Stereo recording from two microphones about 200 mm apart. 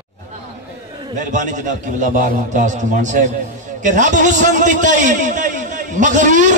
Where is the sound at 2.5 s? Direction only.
40° right (ahead or behind).